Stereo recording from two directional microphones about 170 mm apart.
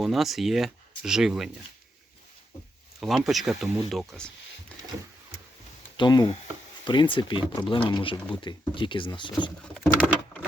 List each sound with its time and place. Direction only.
0.0 s speech: centre (ahead or behind)
3.0 s speech: centre (ahead or behind)
6.0 s speech: 25° left (ahead or behind)